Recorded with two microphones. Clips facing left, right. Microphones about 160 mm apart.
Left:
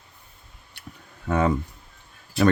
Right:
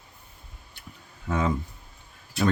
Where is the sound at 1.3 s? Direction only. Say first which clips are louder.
Left 4 dB; 60° left (ahead or behind).